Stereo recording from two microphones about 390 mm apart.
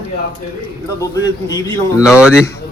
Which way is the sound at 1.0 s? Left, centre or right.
Centre.